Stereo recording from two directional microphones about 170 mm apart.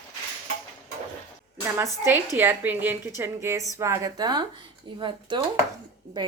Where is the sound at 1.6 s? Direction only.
15° right (ahead or behind).